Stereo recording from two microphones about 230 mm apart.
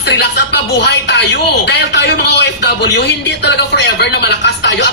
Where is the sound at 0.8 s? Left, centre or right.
Left.